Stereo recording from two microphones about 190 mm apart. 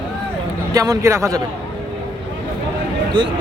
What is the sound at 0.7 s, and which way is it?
Speech, 15° right (ahead or behind).